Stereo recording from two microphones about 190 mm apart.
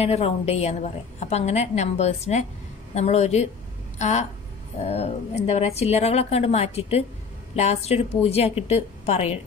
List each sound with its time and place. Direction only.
0.0 s a woman's voice: 35° left (ahead or behind)